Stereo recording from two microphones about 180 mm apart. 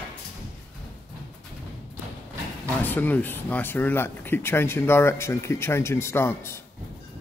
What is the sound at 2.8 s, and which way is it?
Speech, 10° left (ahead or behind).